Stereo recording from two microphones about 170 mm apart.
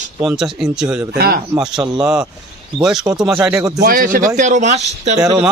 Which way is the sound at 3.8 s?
55° right (ahead or behind).